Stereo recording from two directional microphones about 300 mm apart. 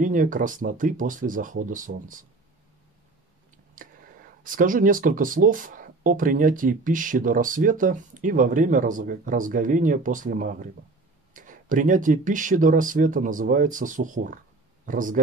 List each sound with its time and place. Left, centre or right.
0.0 s speech: right
3.8 s a sound: right
4.4 s speech: right